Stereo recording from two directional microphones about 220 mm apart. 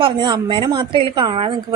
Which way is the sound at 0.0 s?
20° right (ahead or behind).